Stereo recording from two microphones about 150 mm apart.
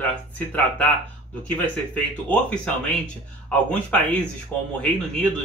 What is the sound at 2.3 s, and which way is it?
A man's voice, 10° left (ahead or behind).